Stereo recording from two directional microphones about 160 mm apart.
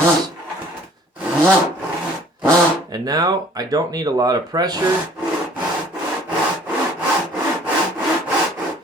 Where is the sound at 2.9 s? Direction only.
25° right (ahead or behind).